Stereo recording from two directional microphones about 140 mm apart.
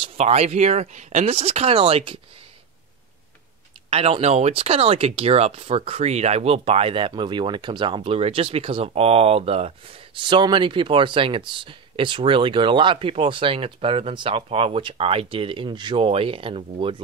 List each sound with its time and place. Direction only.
0.0 s speech: 50° right (ahead or behind)
3.9 s speech: 45° right (ahead or behind)